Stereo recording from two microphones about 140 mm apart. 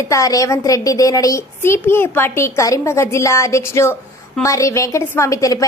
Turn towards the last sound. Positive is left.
turn(degrees=25)  # may be behind; listen again after turning